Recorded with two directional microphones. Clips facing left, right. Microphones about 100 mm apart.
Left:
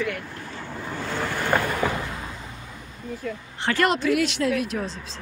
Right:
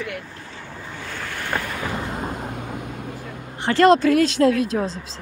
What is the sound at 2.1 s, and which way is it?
Vehicle, 55° right (ahead or behind).